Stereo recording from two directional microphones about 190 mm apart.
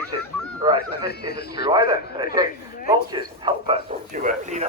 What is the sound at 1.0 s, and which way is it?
Speech, 55° left (ahead or behind).